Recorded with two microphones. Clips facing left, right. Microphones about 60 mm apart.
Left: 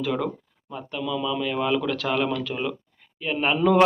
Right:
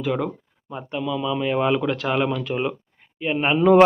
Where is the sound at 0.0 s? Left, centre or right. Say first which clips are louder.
Right 2 dB; centre.